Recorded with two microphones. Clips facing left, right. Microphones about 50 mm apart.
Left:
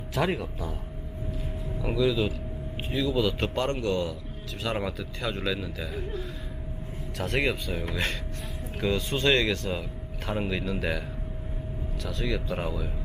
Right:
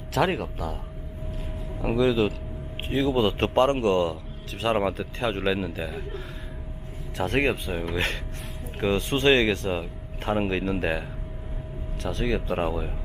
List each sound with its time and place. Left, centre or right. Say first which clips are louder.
0.3 s speech: right 3 dB; right
1.8 s a man's voice: right 3 dB; right
7.9 s a man's voice: right 4 dB; right
12.0 s speech: right 4 dB; right